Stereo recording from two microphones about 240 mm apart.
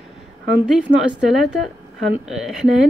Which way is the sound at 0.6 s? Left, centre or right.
Centre.